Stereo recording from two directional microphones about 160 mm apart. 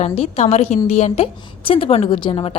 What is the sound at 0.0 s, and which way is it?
A woman's voice, 45° left (ahead or behind).